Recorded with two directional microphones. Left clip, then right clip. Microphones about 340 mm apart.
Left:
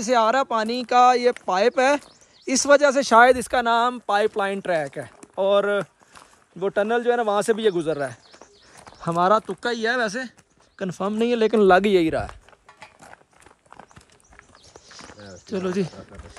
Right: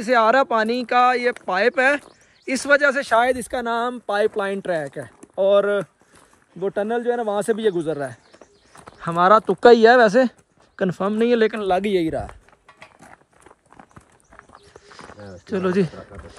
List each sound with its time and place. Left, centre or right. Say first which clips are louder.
0.0 s speech: right 3 dB; centre
3.1 s a man's voice: left 4 dB; left
3.4 s speech: left 3 dB; centre
11.5 s a man's voice: left 4 dB; left
12.1 s speech: left 1 dB; centre
12.6 s horse: even; left
14.7 s clip-clop: even; centre
15.1 s a sound: right 3 dB; centre
15.4 s speech: right 5 dB; centre